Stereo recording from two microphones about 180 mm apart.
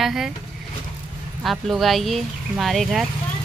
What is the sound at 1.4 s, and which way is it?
Speech, centre (ahead or behind).